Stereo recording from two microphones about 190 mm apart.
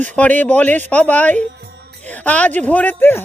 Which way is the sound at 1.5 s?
60° right (ahead or behind).